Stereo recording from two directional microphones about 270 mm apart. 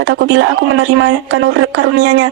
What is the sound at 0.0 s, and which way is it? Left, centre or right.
Speech, right.